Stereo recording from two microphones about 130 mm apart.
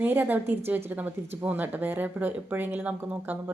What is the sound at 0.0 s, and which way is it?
Speech, 15° right (ahead or behind).